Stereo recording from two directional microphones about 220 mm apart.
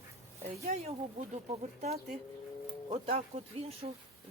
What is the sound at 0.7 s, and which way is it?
Speech, 40° right (ahead or behind).